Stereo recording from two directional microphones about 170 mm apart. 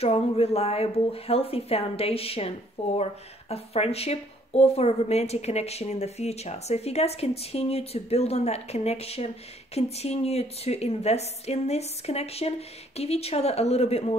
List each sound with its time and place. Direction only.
0.0 s speech: 35° left (ahead or behind)